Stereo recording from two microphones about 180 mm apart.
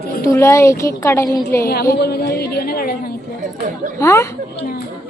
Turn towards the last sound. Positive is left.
turn(degrees=60)  # may be behind; listen again after turning